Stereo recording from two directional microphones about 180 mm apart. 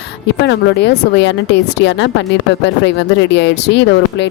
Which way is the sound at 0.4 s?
75° left (ahead or behind).